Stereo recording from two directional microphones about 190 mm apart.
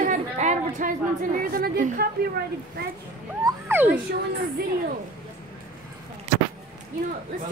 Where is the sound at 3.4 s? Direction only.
10° right (ahead or behind).